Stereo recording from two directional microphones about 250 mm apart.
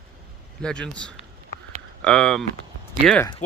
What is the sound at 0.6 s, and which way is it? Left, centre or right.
Speech, centre.